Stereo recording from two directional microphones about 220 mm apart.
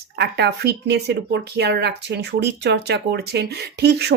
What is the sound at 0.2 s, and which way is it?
Speech, 50° right (ahead or behind).